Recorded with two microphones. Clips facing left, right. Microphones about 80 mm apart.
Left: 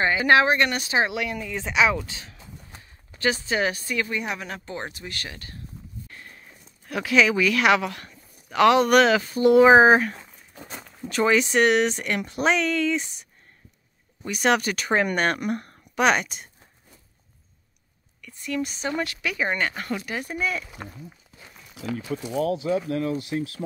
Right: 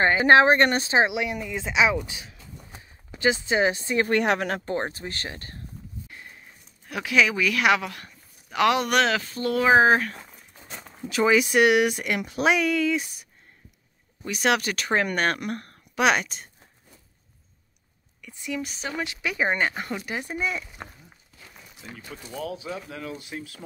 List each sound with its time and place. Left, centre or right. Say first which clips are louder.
0.0 s speech: right 2 dB; right
1.0 s speech: right 1 dB; centre
4.1 s speech: right 7 dB; right
4.8 s speech: right 3 dB; right
6.0 s a sound: even; centre
6.9 s speech: left 2 dB; centre
9.4 s speech: left 5 dB; centre
11.0 s speech: even; centre
18.2 s speech: left 3 dB; centre
19.0 s speech: right 1 dB; right